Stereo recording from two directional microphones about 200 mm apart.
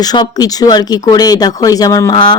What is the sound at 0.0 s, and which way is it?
Speech, 20° left (ahead or behind).